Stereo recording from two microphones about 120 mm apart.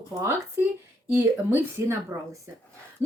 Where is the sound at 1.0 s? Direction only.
15° right (ahead or behind).